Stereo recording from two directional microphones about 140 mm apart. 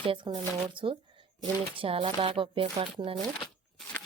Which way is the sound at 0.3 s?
35° right (ahead or behind).